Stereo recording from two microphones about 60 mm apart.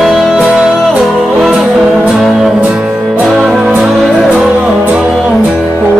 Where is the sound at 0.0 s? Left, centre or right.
Centre.